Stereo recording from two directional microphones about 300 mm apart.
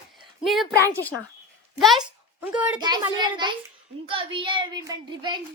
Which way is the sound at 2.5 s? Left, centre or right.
Centre.